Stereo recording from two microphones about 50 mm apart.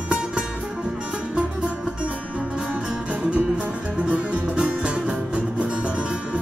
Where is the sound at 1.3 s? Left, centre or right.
Right.